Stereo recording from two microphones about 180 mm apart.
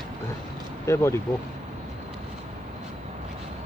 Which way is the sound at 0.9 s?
15° left (ahead or behind).